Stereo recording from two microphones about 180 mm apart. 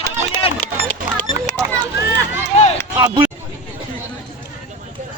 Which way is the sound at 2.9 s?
25° right (ahead or behind).